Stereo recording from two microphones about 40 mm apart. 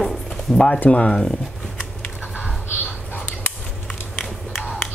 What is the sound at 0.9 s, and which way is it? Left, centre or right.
Speech, left.